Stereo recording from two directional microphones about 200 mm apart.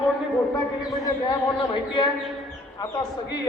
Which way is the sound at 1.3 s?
20° left (ahead or behind).